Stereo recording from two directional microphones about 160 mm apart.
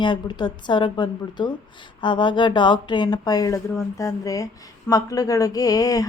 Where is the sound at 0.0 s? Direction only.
30° left (ahead or behind).